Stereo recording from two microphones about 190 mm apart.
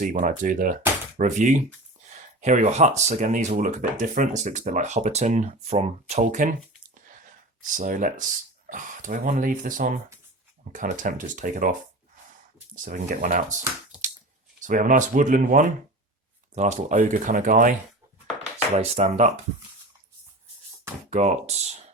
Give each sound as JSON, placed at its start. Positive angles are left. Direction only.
{"t": 0.0, "sound": "speech", "side_deg": -45}
{"t": 7.6, "sound": "speech", "side_deg": -45}
{"t": 12.7, "sound": "speech", "side_deg": -40}
{"t": 14.6, "sound": "speech", "side_deg": -45}
{"t": 21.1, "sound": "speech", "side_deg": -35}